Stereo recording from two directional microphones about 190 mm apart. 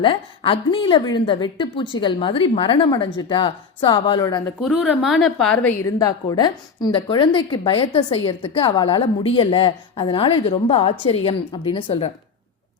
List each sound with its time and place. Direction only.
0.0 s a woman's voice: 25° left (ahead or behind)
4.6 s a woman's voice: centre (ahead or behind)
5.8 s a woman's voice: 20° left (ahead or behind)